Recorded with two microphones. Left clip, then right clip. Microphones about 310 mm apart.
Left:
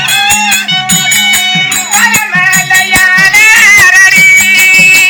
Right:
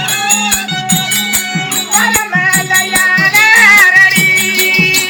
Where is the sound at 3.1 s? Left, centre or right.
Centre.